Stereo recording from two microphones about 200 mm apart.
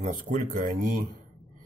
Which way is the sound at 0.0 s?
40° right (ahead or behind).